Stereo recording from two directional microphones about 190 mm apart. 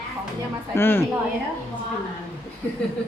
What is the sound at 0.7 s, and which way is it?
Speech, 10° left (ahead or behind).